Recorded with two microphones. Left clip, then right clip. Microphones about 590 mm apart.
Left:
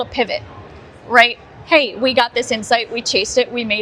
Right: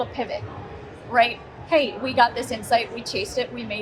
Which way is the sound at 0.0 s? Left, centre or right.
Left.